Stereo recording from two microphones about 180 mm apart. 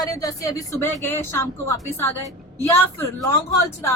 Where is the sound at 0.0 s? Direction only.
20° left (ahead or behind).